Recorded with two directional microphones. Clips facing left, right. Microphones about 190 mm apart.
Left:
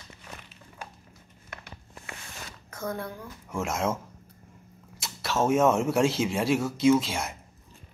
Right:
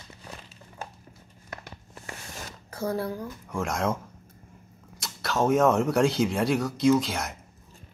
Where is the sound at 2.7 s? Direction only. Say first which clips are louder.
Right 5 dB; 35° right (ahead or behind).